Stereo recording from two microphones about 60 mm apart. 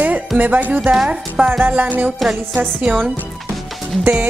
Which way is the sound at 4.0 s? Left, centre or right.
Right.